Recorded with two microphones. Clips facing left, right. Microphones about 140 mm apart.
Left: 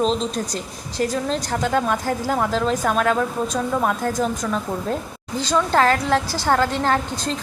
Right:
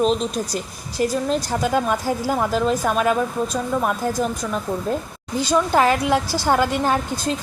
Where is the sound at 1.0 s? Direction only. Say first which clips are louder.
Right 2 dB; 10° right (ahead or behind).